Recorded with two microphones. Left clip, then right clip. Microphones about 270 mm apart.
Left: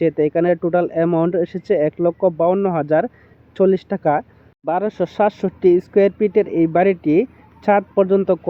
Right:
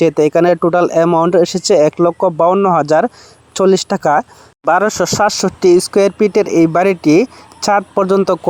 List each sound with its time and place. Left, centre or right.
0.0 s speech: right